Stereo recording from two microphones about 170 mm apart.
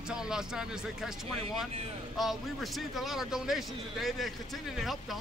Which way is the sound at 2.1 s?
Centre (ahead or behind).